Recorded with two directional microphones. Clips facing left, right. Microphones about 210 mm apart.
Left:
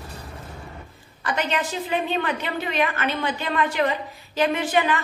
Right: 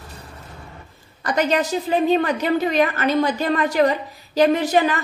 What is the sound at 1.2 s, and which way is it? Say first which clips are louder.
A woman's voice: right 6 dB; 40° right (ahead or behind).